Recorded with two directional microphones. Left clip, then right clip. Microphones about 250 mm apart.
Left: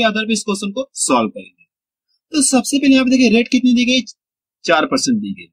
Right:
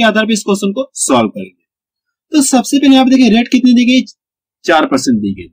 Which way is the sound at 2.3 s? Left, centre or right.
Centre.